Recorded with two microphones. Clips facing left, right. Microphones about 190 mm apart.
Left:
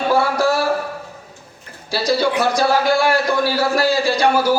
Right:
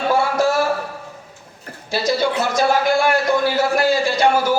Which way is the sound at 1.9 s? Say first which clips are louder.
Left 1 dB; 20° right (ahead or behind).